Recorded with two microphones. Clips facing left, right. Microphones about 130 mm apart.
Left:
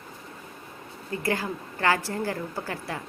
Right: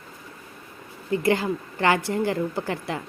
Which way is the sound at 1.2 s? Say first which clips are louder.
Right 5 dB; 20° right (ahead or behind).